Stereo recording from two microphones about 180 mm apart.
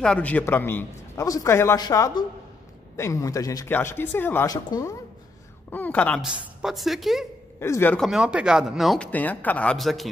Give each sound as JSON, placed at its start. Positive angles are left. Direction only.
{"t": 0.0, "sound": "a man's voice", "side_deg": 5}
{"t": 5.7, "sound": "a man's voice", "side_deg": 10}
{"t": 7.6, "sound": "speech", "side_deg": 15}